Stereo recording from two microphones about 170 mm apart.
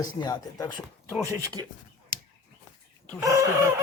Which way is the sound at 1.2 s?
20° right (ahead or behind).